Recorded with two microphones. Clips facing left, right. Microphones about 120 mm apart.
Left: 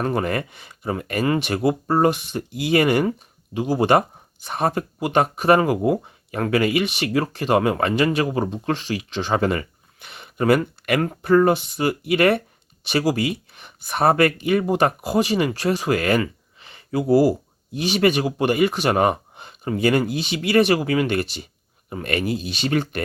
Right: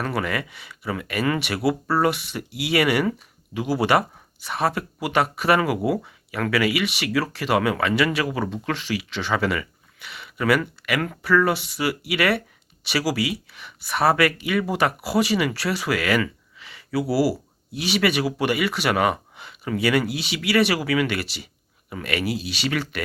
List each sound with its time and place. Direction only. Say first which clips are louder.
0.0 s speech: left 3 dB; 40° left (ahead or behind)
16.2 s a sound: left 1 dB; 40° left (ahead or behind)
17.7 s speech: left 3 dB; 45° left (ahead or behind)